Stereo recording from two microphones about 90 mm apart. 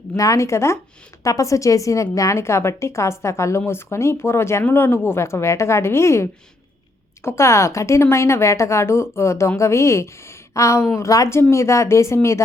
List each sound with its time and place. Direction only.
0.2 s a woman's voice: 35° left (ahead or behind)
7.3 s a woman's voice: 30° left (ahead or behind)